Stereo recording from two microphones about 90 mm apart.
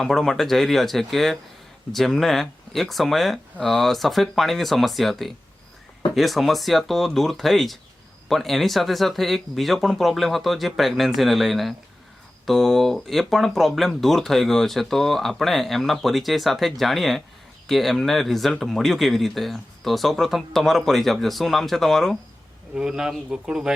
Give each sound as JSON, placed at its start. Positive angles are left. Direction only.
{"t": 0.0, "sound": "speech", "side_deg": 5}
{"t": 22.7, "sound": "speech", "side_deg": -10}